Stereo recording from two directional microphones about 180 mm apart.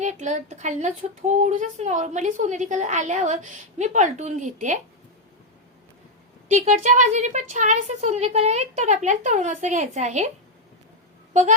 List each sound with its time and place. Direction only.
0.0 s speech: 40° right (ahead or behind)
6.5 s speech: 40° right (ahead or behind)